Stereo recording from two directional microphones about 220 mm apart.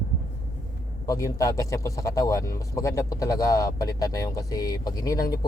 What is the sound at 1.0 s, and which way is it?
Speech, 15° left (ahead or behind).